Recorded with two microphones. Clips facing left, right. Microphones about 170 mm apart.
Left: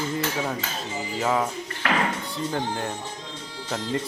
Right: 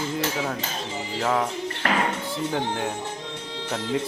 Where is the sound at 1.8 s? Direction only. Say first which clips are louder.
Even; 40° right (ahead or behind).